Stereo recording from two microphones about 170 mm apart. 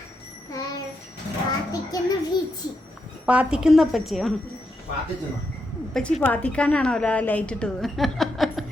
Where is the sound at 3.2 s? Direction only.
5° right (ahead or behind).